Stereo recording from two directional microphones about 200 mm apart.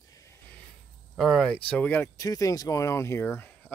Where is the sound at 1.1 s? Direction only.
Centre (ahead or behind).